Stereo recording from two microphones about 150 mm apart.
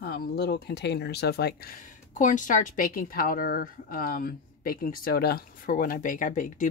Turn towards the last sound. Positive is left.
turn(degrees=60)  # may be behind; listen again after turning